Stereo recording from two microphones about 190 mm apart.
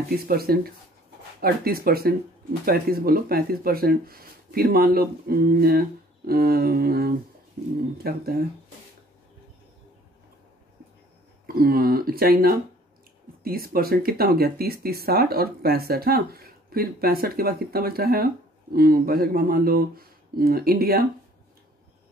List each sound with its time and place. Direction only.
0.3 s speech: 55° right (ahead or behind)
11.4 s speech: 50° right (ahead or behind)